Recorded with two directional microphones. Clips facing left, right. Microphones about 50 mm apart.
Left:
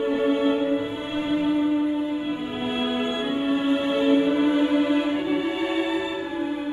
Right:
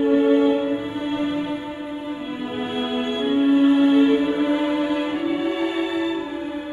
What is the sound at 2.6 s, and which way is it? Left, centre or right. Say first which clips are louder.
Music: right 1 dB; centre.